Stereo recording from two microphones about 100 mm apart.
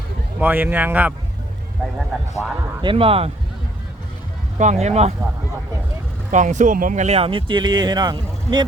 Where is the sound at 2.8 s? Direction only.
65° right (ahead or behind).